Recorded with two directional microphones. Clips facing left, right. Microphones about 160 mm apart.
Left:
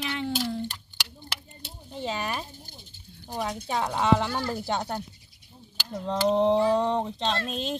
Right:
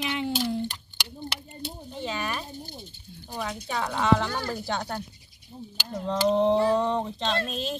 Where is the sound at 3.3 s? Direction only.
20° left (ahead or behind).